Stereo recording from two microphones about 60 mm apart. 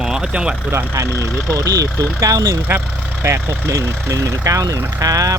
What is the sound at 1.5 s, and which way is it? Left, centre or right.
Speech, right.